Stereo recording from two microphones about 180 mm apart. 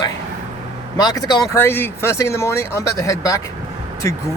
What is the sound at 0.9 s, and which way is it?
Speech, 20° left (ahead or behind).